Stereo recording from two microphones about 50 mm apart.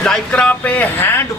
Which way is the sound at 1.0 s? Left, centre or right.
Left.